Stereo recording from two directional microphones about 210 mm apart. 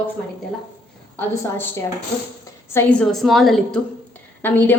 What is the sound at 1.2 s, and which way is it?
A woman's voice, 10° left (ahead or behind).